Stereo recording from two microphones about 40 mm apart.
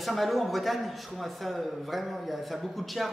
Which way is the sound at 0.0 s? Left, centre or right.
Centre.